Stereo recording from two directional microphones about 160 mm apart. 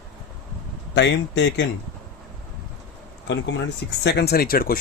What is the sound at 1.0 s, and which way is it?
Speech, 90° left.